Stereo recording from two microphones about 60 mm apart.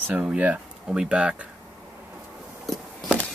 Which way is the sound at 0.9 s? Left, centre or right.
Centre.